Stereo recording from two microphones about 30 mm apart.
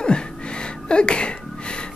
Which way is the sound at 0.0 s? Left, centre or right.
Left.